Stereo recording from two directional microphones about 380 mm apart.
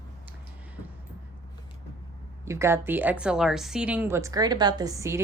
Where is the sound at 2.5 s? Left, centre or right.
Centre.